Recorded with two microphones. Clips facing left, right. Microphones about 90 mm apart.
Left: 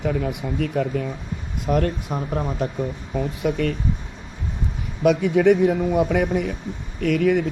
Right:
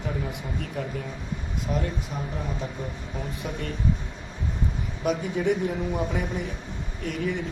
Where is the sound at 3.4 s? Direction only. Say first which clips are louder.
Left 13 dB; 70° left (ahead or behind).